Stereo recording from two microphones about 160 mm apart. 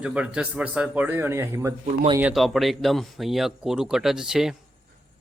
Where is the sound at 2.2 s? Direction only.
5° right (ahead or behind).